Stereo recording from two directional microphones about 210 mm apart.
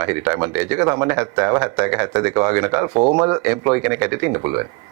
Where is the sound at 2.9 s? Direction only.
30° right (ahead or behind).